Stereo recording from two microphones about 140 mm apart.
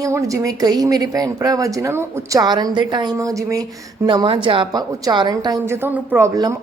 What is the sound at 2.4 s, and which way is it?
Speech, 30° right (ahead or behind).